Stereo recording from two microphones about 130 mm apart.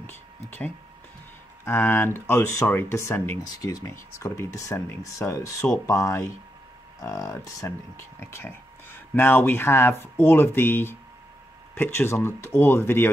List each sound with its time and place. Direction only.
0.5 s speech: 15° left (ahead or behind)